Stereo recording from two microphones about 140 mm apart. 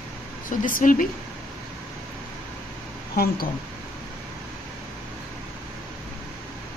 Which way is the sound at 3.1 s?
90° left.